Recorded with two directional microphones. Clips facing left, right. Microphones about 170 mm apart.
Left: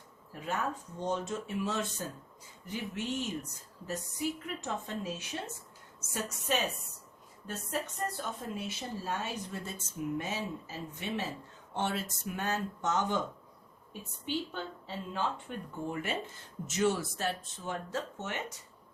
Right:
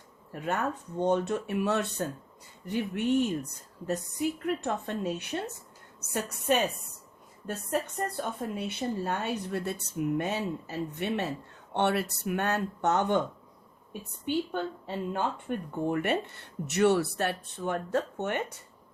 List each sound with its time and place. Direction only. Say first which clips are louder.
0.3 s speech: right 4 dB; 60° right (ahead or behind)
8.2 s speech: right 5 dB; 60° right (ahead or behind)
14.3 s speech: right 6 dB; 55° right (ahead or behind)